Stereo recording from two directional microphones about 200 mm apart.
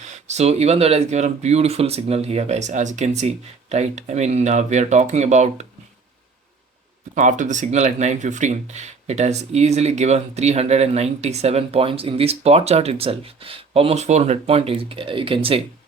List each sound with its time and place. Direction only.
0.0 s speech: 35° right (ahead or behind)
7.2 s speech: 40° right (ahead or behind)